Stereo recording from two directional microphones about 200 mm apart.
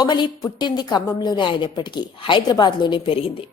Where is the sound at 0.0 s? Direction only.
20° left (ahead or behind).